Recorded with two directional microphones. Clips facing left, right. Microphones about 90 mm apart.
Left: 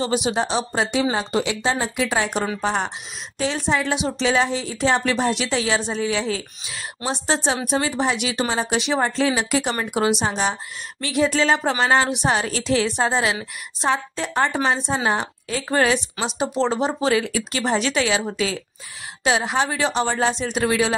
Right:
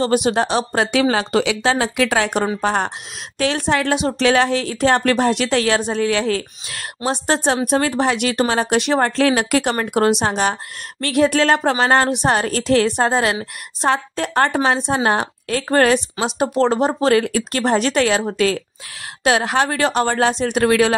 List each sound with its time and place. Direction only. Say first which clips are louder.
0.0 s speech: right 5 dB; 55° right (ahead or behind)
3.3 s speech: right 4 dB; 65° right (ahead or behind); by 18.2 s 50° right (ahead or behind)
19.2 s speech: right 4 dB; 60° right (ahead or behind)